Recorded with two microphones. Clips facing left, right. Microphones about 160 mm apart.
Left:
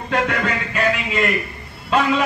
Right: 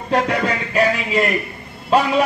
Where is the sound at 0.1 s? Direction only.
35° right (ahead or behind).